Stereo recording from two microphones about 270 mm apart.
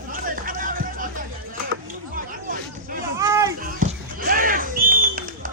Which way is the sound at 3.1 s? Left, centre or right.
Centre.